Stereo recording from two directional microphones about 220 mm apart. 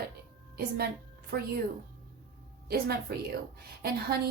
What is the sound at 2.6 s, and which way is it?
A woman's voice, 45° right (ahead or behind).